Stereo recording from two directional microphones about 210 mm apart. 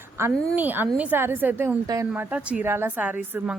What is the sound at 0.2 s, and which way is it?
A woman's voice, 10° right (ahead or behind).